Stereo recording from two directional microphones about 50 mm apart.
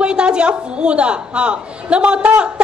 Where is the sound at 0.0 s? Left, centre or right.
Centre.